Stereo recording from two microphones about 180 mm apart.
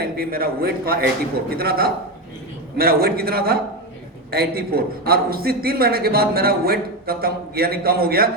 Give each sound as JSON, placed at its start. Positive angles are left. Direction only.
{"t": 0.0, "sound": "a man's voice", "side_deg": -55}